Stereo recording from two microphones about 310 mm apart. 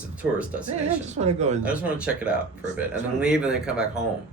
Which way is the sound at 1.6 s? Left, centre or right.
Centre.